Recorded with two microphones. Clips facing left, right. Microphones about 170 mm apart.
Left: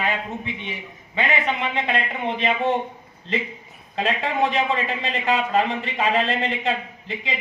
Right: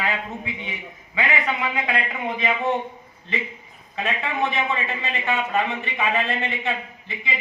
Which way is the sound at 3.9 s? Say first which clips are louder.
Left 3 dB; 30° left (ahead or behind).